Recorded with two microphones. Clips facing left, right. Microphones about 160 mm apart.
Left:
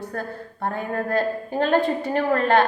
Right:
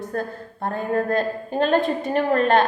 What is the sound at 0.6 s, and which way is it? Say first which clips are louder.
A woman's voice: right 3 dB; 20° right (ahead or behind).